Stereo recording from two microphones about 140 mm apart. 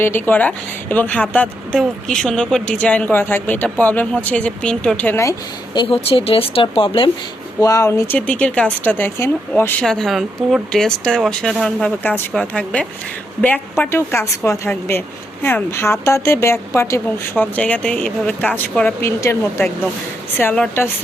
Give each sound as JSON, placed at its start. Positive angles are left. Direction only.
{"t": 0.0, "sound": "a woman's voice", "side_deg": 15}
{"t": 5.7, "sound": "speech", "side_deg": 40}
{"t": 7.6, "sound": "a woman's voice", "side_deg": 25}
{"t": 9.8, "sound": "a woman's voice", "side_deg": 5}
{"t": 19.0, "sound": "a woman's voice", "side_deg": 20}